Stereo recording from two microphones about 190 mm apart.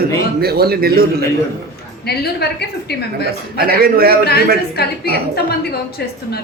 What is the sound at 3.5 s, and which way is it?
Speech, 50° right (ahead or behind).